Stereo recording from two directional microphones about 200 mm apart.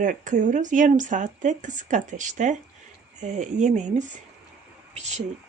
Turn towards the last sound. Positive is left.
turn(degrees=-35)  # may be behind; listen again after turning